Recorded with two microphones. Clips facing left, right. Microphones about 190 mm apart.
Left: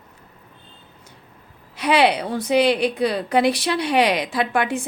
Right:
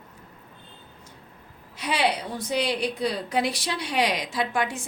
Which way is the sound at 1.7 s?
70° left (ahead or behind).